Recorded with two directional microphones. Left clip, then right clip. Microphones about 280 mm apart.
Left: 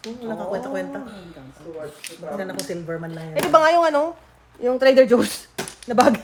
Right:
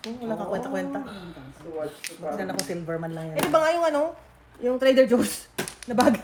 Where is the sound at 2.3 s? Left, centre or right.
Centre.